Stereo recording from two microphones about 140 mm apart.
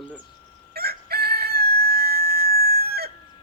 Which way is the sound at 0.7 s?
90° right.